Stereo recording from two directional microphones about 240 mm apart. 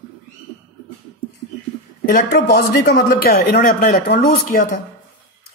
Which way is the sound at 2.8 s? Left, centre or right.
Left.